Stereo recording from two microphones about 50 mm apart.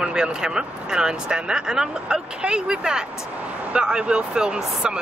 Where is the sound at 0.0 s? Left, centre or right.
Centre.